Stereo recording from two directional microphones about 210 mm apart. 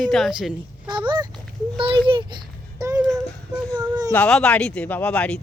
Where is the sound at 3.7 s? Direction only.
20° right (ahead or behind).